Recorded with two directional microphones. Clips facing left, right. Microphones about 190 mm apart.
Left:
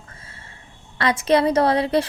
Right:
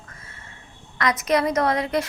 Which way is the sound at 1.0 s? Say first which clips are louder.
Left 3 dB; 30° left (ahead or behind).